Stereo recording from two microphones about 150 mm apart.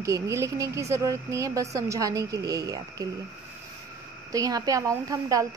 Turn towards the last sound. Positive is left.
turn(degrees=-20)  # may be behind; listen again after turning